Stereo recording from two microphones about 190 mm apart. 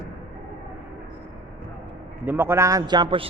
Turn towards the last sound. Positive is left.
turn(degrees=-25)  # may be behind; listen again after turning